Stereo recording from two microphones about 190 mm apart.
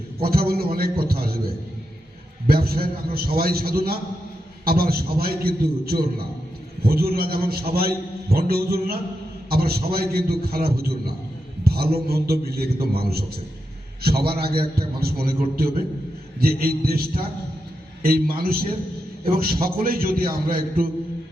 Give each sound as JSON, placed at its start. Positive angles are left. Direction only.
{"t": 0.2, "sound": "a man's voice", "side_deg": -50}
{"t": 2.5, "sound": "a man's voice", "side_deg": -55}